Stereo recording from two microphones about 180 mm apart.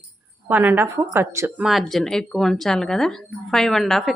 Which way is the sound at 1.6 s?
Centre (ahead or behind).